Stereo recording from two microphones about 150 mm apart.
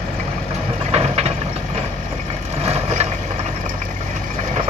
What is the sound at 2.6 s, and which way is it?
Vehicle, 45° right (ahead or behind).